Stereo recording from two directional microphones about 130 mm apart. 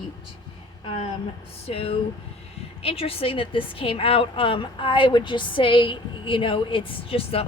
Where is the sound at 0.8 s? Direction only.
45° left (ahead or behind).